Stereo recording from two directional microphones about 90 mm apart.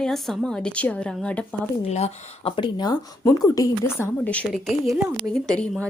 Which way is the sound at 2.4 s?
80° left.